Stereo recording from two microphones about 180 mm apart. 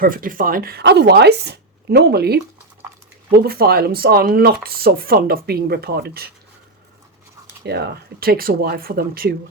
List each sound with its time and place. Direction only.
0.0 s speech: 50° right (ahead or behind)
7.6 s speech: 65° right (ahead or behind)